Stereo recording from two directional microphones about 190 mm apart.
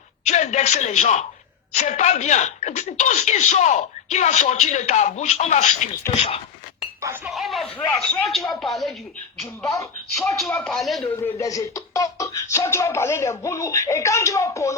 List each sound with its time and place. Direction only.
0.3 s a man's voice: 40° left (ahead or behind)
7.3 s speech: centre (ahead or behind)
9.7 s speech: 15° left (ahead or behind)
10.3 s speech: centre (ahead or behind)
11.2 s speech: 15° left (ahead or behind)